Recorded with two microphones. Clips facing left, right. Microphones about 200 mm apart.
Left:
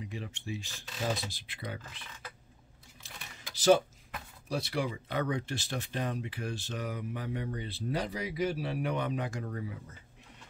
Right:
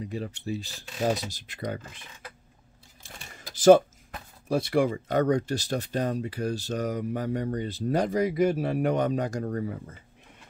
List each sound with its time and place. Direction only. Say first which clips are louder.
0.0 s speech: right 8 dB; 40° right (ahead or behind)
3.0 s a sound: right 3 dB; 50° right (ahead or behind)
4.5 s speech: right 9 dB; 50° right (ahead or behind)